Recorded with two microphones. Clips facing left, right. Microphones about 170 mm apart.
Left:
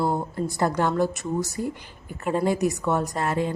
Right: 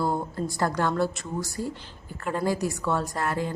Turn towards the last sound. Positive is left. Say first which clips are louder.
# left 3 dB
turn(degrees=20)  # may be behind; listen again after turning